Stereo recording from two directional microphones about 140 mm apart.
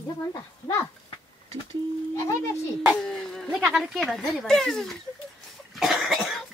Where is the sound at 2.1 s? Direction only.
20° left (ahead or behind).